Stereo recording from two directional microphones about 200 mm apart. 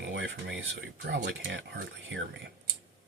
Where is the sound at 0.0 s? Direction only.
65° right (ahead or behind).